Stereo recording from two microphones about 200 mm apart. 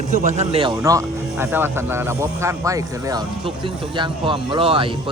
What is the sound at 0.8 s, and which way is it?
Speech, 15° right (ahead or behind).